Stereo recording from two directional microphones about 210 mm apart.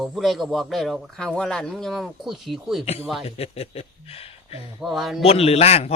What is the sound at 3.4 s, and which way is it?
Speech, 30° left (ahead or behind).